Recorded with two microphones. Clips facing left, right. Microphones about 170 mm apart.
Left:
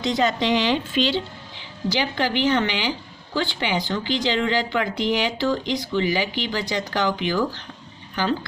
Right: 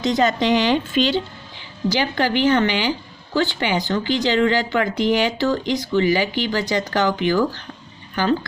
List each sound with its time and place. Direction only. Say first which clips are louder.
0.0 s speech: right 3 dB; 45° right (ahead or behind)